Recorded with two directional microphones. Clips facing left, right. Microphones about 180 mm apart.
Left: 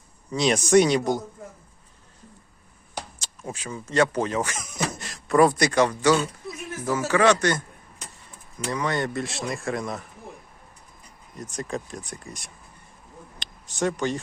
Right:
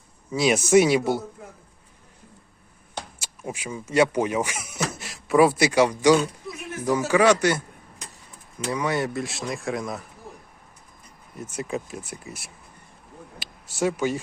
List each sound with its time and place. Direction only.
0.3 s speech: 5° right (ahead or behind)
3.2 s speech: 10° right (ahead or behind)
6.5 s a sound: 60° right (ahead or behind)
6.8 s speech: 15° right (ahead or behind)
8.6 s speech: 10° right (ahead or behind)
11.3 s speech: 5° right (ahead or behind)
13.4 s a sound: 5° right (ahead or behind)